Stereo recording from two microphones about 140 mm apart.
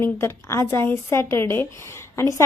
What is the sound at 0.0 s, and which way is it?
A woman's voice, 20° left (ahead or behind).